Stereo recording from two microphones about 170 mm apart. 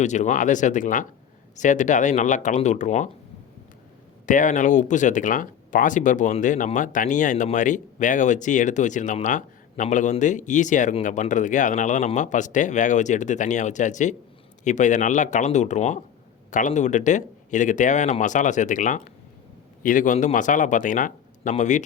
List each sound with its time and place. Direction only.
0.0 s speech: 45° left (ahead or behind)
4.3 s speech: 50° left (ahead or behind)